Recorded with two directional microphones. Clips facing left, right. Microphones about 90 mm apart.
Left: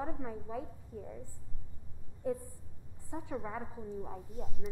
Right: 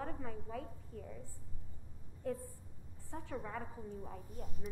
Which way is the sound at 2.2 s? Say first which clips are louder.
Left 4 dB; 15° left (ahead or behind).